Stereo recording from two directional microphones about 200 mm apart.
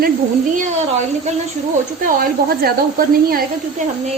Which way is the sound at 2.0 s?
50° right (ahead or behind).